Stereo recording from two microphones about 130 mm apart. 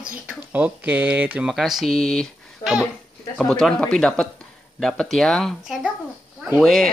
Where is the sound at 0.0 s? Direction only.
10° right (ahead or behind).